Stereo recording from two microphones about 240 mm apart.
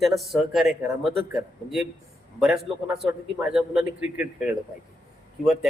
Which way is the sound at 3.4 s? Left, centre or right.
Centre.